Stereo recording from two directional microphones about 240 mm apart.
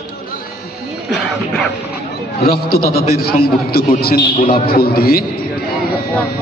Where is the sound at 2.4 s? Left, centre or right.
Left.